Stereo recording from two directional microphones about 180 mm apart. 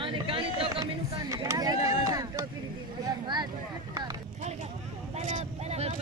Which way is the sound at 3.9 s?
20° right (ahead or behind).